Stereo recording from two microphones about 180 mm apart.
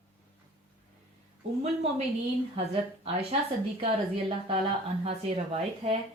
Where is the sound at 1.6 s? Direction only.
35° right (ahead or behind).